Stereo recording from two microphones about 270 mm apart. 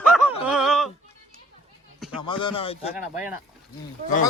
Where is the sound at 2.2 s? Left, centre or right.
Centre.